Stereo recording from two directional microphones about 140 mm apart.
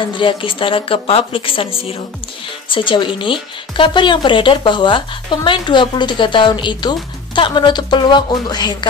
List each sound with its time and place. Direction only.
0.2 s speech: 35° left (ahead or behind)